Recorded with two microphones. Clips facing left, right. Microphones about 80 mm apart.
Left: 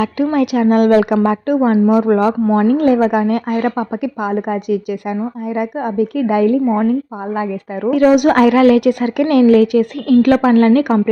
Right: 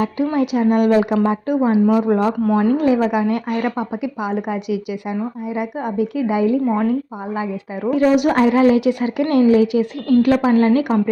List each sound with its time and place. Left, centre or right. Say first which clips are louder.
0.3 s a woman's voice: left 4 dB; left
2.4 s speech: left 3 dB; left
2.6 s speech: left 5 dB; left
7.9 s a woman's voice: left 4 dB; left